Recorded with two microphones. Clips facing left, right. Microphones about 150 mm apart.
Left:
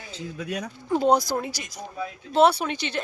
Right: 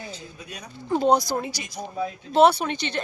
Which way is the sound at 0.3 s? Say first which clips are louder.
Left 9 dB; 90° left.